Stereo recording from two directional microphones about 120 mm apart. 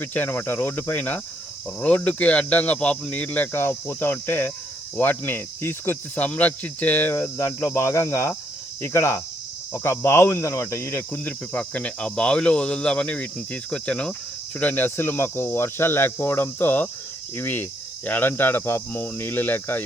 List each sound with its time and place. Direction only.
0.0 s speech: 15° left (ahead or behind)
4.9 s cricket: 20° left (ahead or behind)
9.7 s speech: 25° left (ahead or behind)